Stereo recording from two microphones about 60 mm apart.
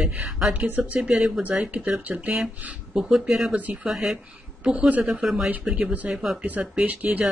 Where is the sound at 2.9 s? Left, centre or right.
Centre.